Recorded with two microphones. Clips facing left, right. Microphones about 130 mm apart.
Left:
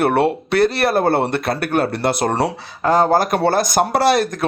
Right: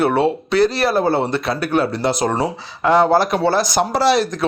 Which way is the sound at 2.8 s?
40° left (ahead or behind).